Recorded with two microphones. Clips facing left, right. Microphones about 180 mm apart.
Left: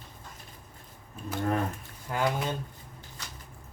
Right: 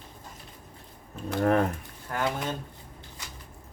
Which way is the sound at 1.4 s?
65° right (ahead or behind).